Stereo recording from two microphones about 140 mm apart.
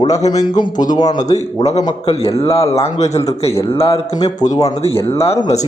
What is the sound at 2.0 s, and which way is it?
Speech, 45° left (ahead or behind).